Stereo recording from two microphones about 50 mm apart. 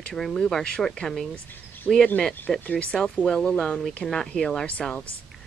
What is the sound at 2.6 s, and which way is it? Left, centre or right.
Speech, left.